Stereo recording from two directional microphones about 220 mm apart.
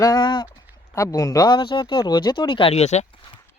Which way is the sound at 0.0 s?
20° left (ahead or behind).